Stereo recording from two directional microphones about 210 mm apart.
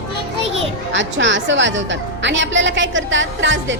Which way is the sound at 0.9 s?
60° right (ahead or behind).